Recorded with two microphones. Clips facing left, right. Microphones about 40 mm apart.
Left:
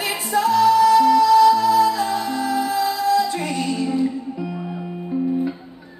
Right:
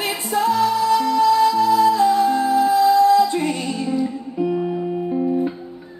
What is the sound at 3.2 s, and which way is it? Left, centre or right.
Music, right.